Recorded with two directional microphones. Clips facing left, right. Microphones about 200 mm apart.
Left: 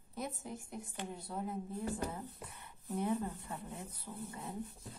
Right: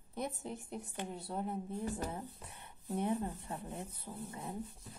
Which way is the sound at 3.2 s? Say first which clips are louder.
Right 1 dB; 30° right (ahead or behind).